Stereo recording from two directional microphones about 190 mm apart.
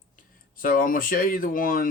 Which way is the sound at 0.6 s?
50° left (ahead or behind).